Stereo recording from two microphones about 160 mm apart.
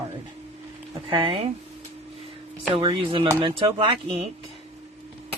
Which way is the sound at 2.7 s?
35° right (ahead or behind).